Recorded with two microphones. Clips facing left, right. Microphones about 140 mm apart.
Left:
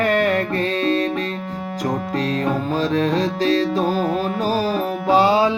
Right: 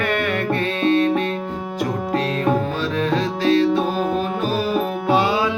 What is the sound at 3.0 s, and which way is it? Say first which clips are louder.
Music: left 1 dB; 35° left (ahead or behind).